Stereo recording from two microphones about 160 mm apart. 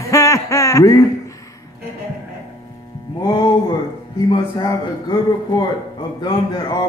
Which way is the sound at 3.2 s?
25° left (ahead or behind).